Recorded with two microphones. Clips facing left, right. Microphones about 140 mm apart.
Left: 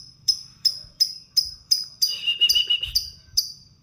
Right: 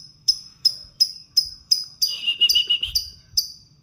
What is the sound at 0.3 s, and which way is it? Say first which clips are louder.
Music: right 2 dB; 10° right (ahead or behind).